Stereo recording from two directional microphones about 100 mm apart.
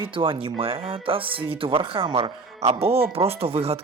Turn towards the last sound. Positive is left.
turn(degrees=-85)